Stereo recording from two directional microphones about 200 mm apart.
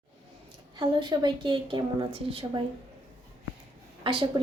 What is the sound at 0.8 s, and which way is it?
A woman's voice, 20° right (ahead or behind).